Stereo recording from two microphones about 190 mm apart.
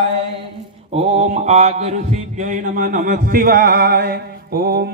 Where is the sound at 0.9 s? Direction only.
35° right (ahead or behind); by 4.9 s 55° right (ahead or behind).